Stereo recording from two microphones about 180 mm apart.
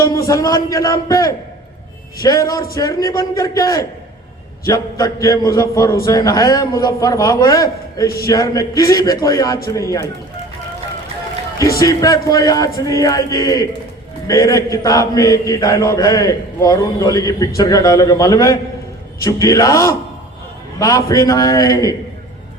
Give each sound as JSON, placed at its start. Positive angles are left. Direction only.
{"t": 0.3, "sound": "chant", "side_deg": 20}
{"t": 9.7, "sound": "a man's voice", "side_deg": 20}
{"t": 11.8, "sound": "chant", "side_deg": 20}
{"t": 19.2, "sound": "a man's voice", "side_deg": 20}
{"t": 20.7, "sound": "chant", "side_deg": 20}